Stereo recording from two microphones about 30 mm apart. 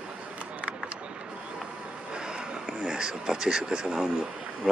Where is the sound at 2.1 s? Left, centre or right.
Right.